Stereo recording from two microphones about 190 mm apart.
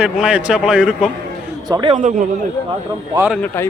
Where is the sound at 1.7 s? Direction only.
25° right (ahead or behind).